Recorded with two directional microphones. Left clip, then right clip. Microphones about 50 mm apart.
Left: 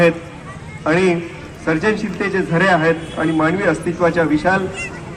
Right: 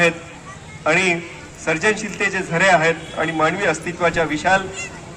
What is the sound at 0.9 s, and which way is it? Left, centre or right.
A man's voice, right.